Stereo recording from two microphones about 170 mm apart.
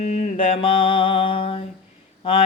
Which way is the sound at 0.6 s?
30° left (ahead or behind).